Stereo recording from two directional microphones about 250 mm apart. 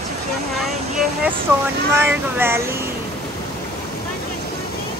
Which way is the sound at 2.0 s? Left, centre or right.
Centre.